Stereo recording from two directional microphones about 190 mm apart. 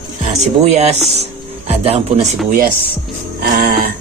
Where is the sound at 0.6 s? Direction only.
35° right (ahead or behind).